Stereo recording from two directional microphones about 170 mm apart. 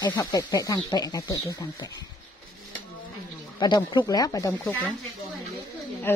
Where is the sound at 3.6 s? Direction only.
25° left (ahead or behind).